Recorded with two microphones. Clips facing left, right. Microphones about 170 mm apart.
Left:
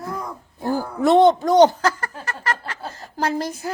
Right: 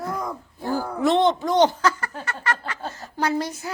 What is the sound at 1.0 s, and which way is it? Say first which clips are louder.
Speech: left 5 dB; 45° left (ahead or behind).